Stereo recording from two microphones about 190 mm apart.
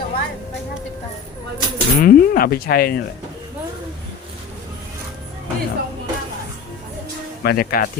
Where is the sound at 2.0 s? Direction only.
50° left (ahead or behind).